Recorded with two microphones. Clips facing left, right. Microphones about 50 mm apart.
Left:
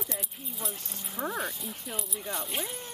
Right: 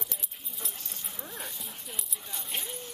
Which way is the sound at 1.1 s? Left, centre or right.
Left.